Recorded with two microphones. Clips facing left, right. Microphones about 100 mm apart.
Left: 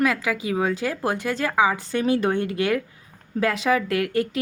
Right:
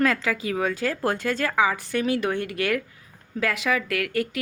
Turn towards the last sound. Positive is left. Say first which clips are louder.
# left 3 dB
turn(degrees=25)  # may be behind; listen again after turning